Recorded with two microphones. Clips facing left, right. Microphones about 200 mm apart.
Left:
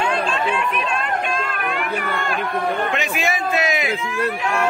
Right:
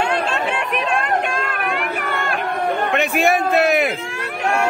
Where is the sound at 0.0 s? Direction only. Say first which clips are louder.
Right 1 dB; 70° right (ahead or behind).